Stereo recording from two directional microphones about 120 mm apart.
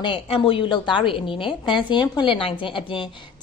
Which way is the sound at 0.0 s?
45° left (ahead or behind).